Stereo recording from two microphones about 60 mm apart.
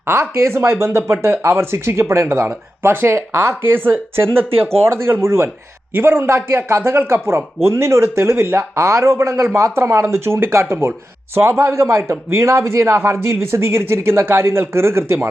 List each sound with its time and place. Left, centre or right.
0.0 s a man's voice: right
2.8 s a man's voice: right